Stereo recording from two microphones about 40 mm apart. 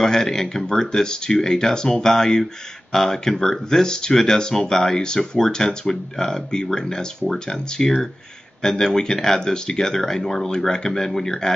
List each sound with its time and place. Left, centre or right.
0.0 s speech: centre
5.0 s speech: centre